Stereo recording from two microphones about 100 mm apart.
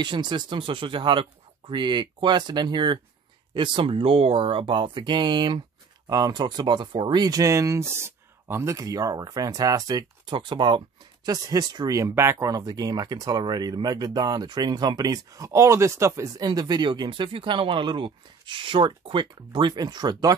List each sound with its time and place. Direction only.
0.0 s speech: 50° right (ahead or behind)
10.4 s speech: 55° right (ahead or behind)
11.2 s speech: 40° right (ahead or behind)